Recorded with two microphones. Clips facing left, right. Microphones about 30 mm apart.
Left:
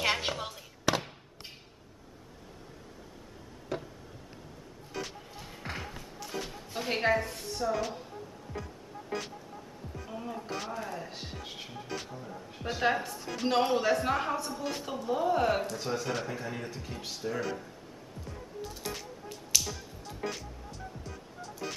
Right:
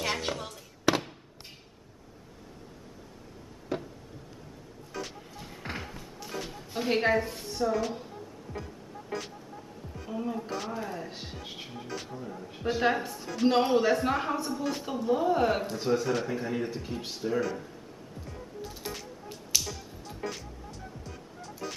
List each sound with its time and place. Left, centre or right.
0.0 s fireworks: centre
0.9 s fireworks: centre
3.7 s a sound: centre
5.0 s music: centre
6.1 s a sound: centre
7.7 s speech: centre
10.0 s a man's voice: centre
17.4 s speech: centre
18.6 s music: centre